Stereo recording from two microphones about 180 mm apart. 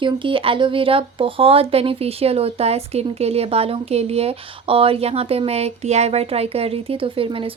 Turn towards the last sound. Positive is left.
turn(degrees=-30)  # may be behind; listen again after turning